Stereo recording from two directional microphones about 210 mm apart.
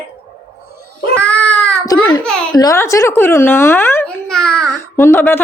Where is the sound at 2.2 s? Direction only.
5° left (ahead or behind).